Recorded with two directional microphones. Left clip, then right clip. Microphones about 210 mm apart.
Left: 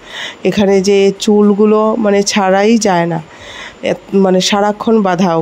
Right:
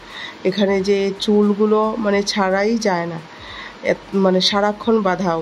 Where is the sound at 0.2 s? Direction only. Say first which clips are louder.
Left 6 dB; 40° left (ahead or behind).